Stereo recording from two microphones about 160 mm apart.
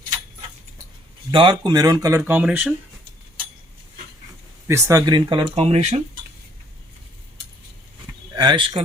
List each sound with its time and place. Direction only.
1.3 s speech: 30° right (ahead or behind); by 2.7 s 5° right (ahead or behind)
4.7 s speech: 20° right (ahead or behind); by 6.0 s 40° right (ahead or behind)
8.4 s speech: 30° right (ahead or behind)